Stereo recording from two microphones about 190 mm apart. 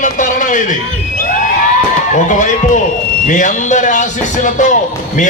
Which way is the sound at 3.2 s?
40° left (ahead or behind).